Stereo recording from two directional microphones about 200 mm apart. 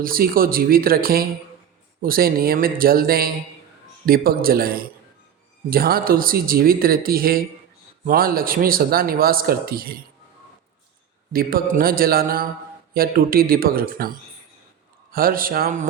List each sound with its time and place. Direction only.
0.0 s speech: 45° right (ahead or behind)
11.3 s speech: 45° right (ahead or behind)
15.1 s speech: 45° right (ahead or behind)